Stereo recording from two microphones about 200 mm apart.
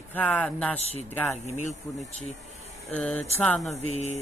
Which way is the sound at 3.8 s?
35° left (ahead or behind).